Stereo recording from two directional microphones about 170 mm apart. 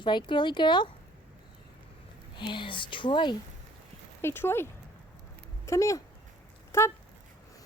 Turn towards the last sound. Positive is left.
turn(degrees=15)  # may be behind; listen again after turning